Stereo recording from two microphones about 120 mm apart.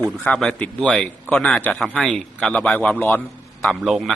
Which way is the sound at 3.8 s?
Centre (ahead or behind).